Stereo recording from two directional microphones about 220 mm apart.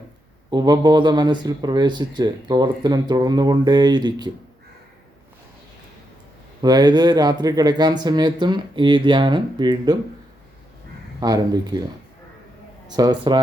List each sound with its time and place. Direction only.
0.5 s speech: 20° right (ahead or behind)
6.6 s speech: 20° right (ahead or behind)
11.2 s speech: 20° right (ahead or behind)
13.0 s speech: 20° right (ahead or behind)